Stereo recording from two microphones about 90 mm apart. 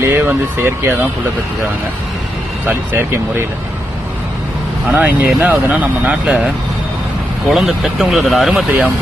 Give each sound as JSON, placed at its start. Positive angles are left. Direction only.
{"t": 0.0, "sound": "speech", "side_deg": -25}
{"t": 2.6, "sound": "speech", "side_deg": -25}
{"t": 4.9, "sound": "speech", "side_deg": -20}
{"t": 7.4, "sound": "speech", "side_deg": 0}